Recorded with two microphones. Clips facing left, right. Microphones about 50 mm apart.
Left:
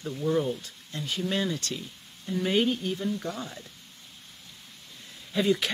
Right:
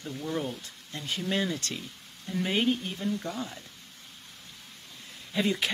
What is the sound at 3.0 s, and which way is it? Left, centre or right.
Speech, centre.